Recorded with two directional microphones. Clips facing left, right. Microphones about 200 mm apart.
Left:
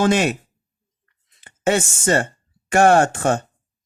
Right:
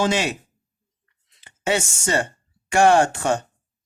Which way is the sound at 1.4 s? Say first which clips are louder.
Left 4 dB; 50° left (ahead or behind).